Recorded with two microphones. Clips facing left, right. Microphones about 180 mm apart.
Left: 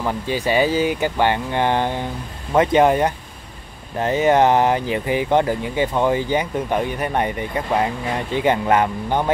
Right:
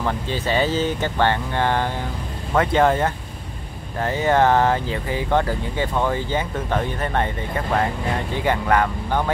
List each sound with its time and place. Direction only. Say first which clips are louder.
0.0 s speech: left 2 dB; 10° left (ahead or behind)